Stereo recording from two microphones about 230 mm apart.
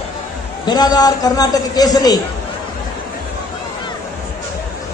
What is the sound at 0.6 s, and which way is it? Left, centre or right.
A man's voice, centre.